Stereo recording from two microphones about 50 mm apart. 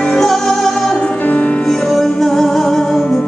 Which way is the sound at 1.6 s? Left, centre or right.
Centre.